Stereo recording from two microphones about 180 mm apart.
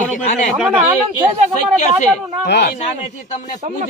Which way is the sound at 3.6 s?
45° right (ahead or behind).